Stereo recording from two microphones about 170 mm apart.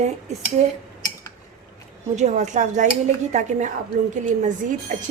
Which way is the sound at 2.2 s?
45° right (ahead or behind).